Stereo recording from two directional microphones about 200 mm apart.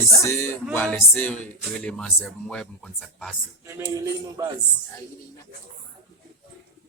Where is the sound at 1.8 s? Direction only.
5° left (ahead or behind).